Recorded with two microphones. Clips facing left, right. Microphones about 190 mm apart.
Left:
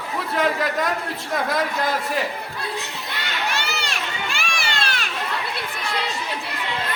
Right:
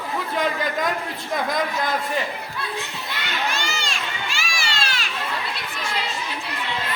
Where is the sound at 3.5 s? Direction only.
65° left (ahead or behind).